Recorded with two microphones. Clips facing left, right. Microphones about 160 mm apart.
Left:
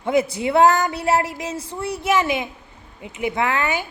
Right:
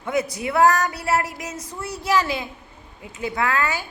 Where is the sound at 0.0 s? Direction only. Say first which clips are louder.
Left 4 dB; 25° left (ahead or behind).